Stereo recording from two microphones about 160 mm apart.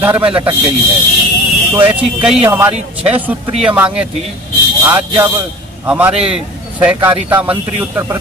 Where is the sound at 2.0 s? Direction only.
5° right (ahead or behind).